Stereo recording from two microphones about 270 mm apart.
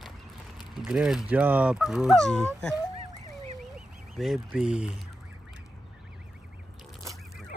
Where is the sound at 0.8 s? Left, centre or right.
Centre.